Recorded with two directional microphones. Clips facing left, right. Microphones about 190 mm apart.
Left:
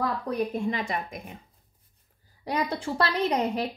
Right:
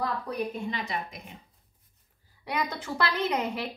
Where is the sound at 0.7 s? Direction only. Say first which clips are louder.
Left 4 dB; 50° left (ahead or behind).